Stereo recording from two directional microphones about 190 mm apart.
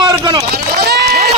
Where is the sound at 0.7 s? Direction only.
55° right (ahead or behind).